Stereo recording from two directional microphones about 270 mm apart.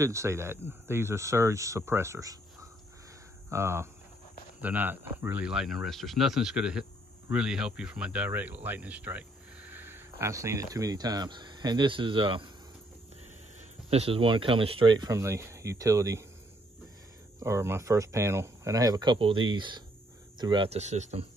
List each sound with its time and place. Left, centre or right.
0.0 s speech: centre
13.8 s speech: right
17.4 s speech: centre